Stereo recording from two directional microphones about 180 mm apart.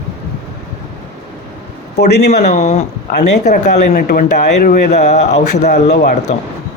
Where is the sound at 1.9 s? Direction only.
65° left (ahead or behind).